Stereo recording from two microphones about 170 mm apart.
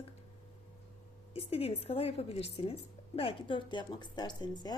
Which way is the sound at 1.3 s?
35° left (ahead or behind).